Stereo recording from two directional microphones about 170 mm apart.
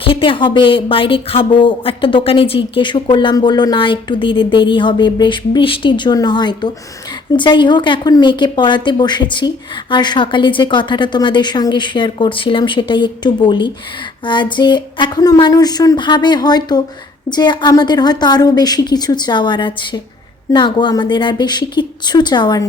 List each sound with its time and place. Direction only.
0.0 s a woman's voice: 30° left (ahead or behind)